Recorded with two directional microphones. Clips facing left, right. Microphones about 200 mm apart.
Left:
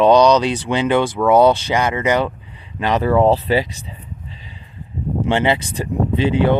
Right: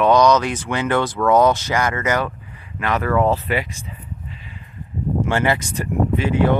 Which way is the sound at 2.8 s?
30° left (ahead or behind).